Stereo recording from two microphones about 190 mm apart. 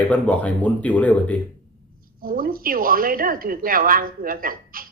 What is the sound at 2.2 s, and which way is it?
A woman's voice, 50° right (ahead or behind).